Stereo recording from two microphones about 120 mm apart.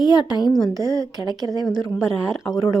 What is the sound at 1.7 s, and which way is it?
Speech, 30° left (ahead or behind).